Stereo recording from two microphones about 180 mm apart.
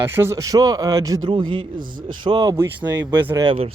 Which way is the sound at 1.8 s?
50° right (ahead or behind).